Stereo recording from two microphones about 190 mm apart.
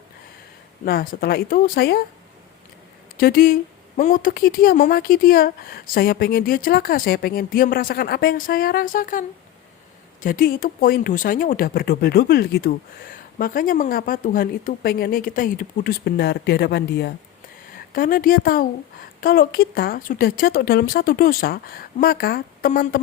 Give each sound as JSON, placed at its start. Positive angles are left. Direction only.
{"t": 0.9, "sound": "speech", "side_deg": 55}
{"t": 3.2, "sound": "speech", "side_deg": 50}
{"t": 17.9, "sound": "speech", "side_deg": 45}